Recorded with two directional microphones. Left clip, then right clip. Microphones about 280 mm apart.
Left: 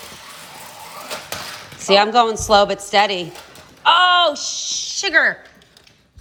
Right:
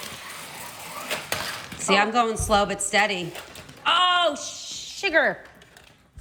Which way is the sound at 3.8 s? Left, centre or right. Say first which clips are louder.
Left 7 dB; centre.